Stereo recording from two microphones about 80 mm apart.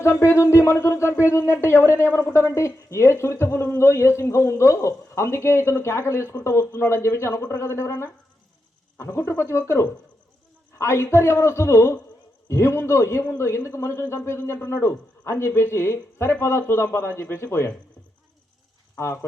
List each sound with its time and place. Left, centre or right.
0.0 s speech: left
18.9 s speech: left